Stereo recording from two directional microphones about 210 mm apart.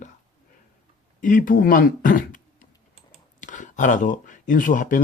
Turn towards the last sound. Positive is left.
turn(degrees=40)  # may be behind; listen again after turning